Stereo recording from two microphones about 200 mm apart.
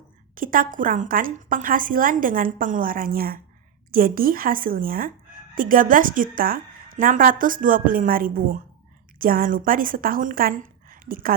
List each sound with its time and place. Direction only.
0.3 s a woman's voice: 45° right (ahead or behind)